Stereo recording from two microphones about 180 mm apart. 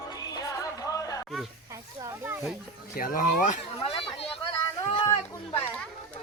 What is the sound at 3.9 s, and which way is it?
Chatter, 30° left (ahead or behind).